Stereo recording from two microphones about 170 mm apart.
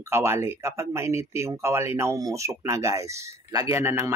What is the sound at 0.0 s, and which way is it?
Speech, 15° right (ahead or behind).